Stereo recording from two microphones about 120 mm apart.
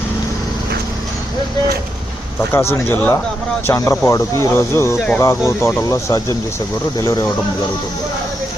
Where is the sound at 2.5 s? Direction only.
20° left (ahead or behind).